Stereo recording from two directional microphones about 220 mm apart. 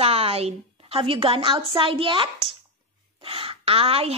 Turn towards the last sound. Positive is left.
turn(degrees=-25)  # may be behind; listen again after turning